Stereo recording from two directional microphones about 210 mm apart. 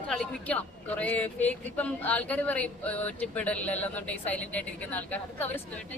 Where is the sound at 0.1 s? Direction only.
5° left (ahead or behind).